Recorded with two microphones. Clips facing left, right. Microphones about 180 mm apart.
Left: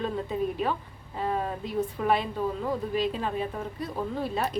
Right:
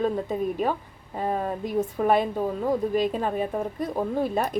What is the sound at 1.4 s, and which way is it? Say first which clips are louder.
Speech: right 3 dB; 45° right (ahead or behind).